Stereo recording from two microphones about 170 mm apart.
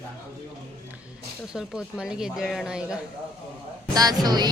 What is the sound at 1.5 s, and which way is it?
A woman's voice, 5° right (ahead or behind).